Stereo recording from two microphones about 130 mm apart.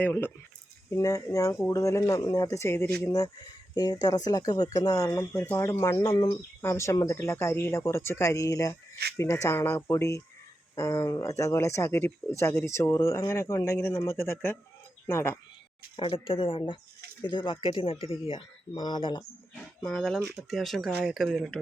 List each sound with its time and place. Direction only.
0.0 s speech: 15° left (ahead or behind)
16.0 s speech: 45° left (ahead or behind)
19.8 s speech: 5° left (ahead or behind)